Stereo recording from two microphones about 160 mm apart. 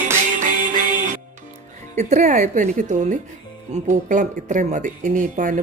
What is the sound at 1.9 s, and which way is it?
A woman's voice, 45° right (ahead or behind).